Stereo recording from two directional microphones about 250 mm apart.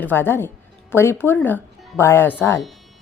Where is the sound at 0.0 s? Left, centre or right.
Centre.